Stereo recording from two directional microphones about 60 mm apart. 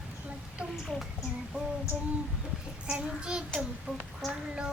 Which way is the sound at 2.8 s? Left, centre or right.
Centre.